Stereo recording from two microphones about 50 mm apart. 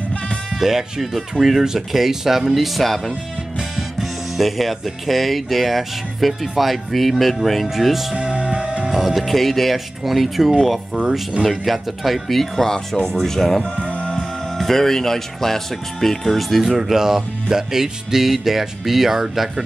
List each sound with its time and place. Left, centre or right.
0.6 s speech: centre
8.2 s music: right
8.9 s speech: centre
13.7 s music: left
14.0 s speech: centre